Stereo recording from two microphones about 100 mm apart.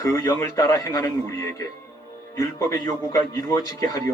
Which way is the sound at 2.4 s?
30° left (ahead or behind).